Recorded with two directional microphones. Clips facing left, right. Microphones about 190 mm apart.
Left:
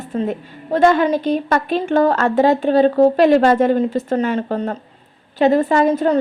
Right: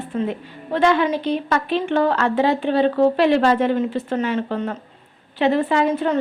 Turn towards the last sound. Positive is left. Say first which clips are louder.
# left 4 dB
turn(degrees=40)  # may be behind; listen again after turning